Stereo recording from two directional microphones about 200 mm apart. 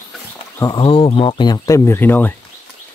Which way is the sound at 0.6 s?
25° left (ahead or behind).